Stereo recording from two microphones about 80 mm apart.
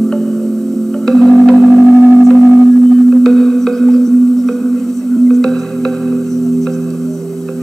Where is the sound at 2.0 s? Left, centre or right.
Right.